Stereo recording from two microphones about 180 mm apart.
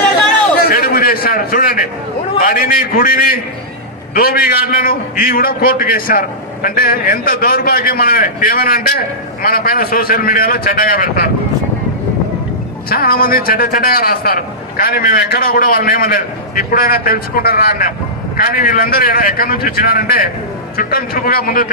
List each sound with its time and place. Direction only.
0.6 s a sound: 55° left (ahead or behind)
2.3 s a man's voice: 50° left (ahead or behind)
12.9 s a man's voice: 55° left (ahead or behind)